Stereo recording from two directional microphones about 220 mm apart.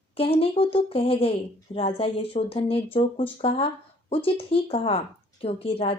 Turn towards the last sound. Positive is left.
turn(degrees=25)  # may be behind; listen again after turning